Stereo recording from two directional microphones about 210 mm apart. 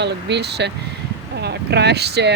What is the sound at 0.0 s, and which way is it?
Speech, 55° right (ahead or behind).